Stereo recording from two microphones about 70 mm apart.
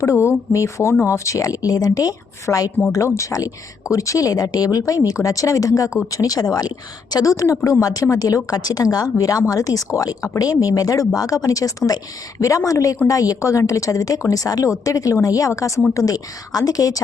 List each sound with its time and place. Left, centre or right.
0.0 s a woman's voice: left